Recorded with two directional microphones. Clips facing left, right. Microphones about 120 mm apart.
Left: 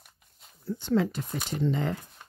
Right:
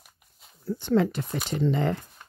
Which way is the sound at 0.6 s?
55° right (ahead or behind).